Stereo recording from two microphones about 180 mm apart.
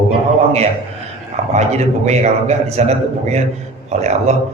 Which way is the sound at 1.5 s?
40° right (ahead or behind).